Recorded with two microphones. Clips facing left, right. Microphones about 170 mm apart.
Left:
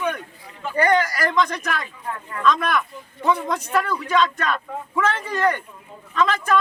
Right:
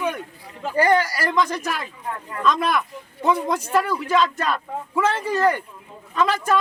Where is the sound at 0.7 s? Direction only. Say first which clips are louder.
Right 1 dB; 30° right (ahead or behind).